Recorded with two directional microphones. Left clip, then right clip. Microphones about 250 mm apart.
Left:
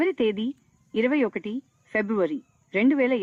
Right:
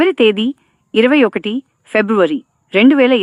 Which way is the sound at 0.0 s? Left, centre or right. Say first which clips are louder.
Right 12 dB; right.